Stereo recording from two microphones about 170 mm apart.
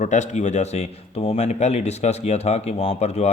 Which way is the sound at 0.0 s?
45° left (ahead or behind).